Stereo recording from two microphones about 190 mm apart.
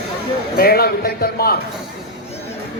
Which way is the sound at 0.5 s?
55° left (ahead or behind).